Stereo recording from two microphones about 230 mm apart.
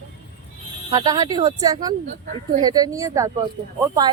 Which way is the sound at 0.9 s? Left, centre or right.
Centre.